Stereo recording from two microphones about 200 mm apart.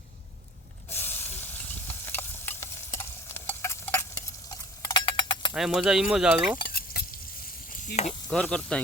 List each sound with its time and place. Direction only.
0.9 s a sound: 10° left (ahead or behind)
5.5 s speech: 5° right (ahead or behind)
6.6 s stir: 50° left (ahead or behind)
8.3 s speech: 5° left (ahead or behind)